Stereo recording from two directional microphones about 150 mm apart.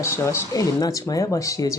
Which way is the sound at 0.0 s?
20° left (ahead or behind).